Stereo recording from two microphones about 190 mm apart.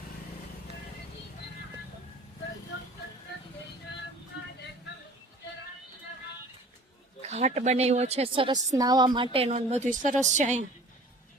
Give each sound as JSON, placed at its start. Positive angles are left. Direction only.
{"t": 7.2, "sound": "a woman's voice", "side_deg": -35}